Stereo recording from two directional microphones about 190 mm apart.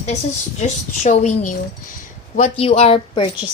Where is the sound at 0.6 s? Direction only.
35° left (ahead or behind).